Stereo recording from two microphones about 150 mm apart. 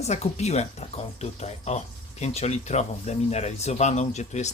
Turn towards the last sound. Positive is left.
turn(degrees=50)  # may be behind; listen again after turning